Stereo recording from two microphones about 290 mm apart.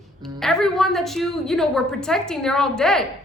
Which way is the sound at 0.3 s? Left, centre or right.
Centre.